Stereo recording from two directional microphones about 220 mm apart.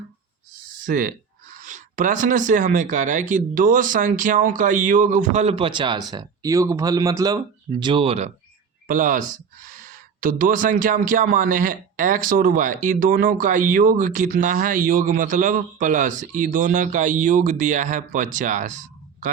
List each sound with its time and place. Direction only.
0.9 s speech: 40° right (ahead or behind)
8.9 s speech: 40° right (ahead or behind)